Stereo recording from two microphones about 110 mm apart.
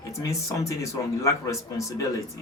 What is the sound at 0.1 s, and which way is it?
Speech, 30° left (ahead or behind).